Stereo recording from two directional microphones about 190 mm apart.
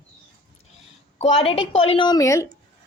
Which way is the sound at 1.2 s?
30° left (ahead or behind).